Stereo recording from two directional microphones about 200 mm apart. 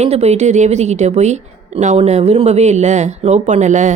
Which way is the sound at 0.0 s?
35° right (ahead or behind).